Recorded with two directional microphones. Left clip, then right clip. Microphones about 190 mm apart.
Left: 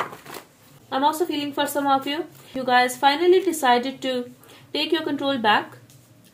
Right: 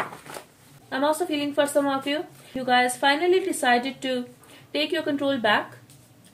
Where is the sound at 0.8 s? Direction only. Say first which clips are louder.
Left 2 dB; 25° left (ahead or behind).